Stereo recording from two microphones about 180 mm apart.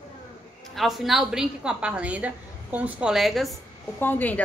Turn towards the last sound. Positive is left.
turn(degrees=10)  # may be behind; listen again after turning